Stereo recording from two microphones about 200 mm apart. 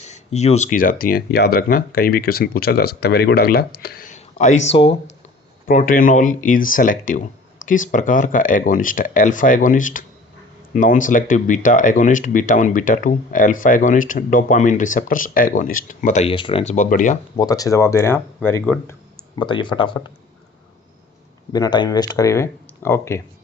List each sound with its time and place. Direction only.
0.0 s speech: 35° left (ahead or behind)
5.6 s speech: 45° left (ahead or behind)
16.3 s speech: 25° left (ahead or behind)
17.3 s speech: 20° left (ahead or behind)
19.4 s speech: 25° left (ahead or behind)
21.5 s speech: 20° left (ahead or behind)